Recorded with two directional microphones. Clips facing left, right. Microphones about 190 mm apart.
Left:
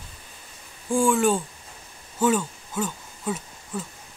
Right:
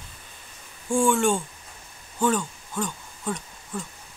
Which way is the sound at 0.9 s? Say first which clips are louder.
Left 1 dB; centre (ahead or behind).